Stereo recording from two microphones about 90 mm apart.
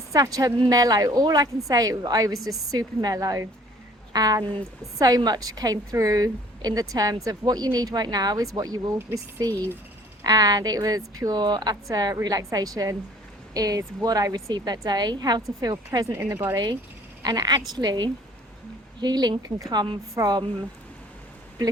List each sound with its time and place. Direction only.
0.1 s a woman's voice: 45° right (ahead or behind)
14.5 s a woman's voice: 50° right (ahead or behind)
16.1 s speech: 30° right (ahead or behind)
17.2 s a woman's voice: 50° right (ahead or behind)
20.1 s a woman's voice: 45° right (ahead or behind)